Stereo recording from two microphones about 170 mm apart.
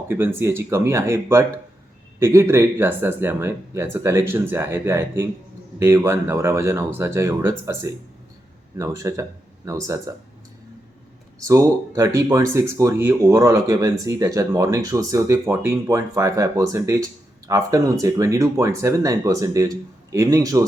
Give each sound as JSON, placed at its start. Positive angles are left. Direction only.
{"t": 0.1, "sound": "speech", "side_deg": -15}
{"t": 11.3, "sound": "speech", "side_deg": -15}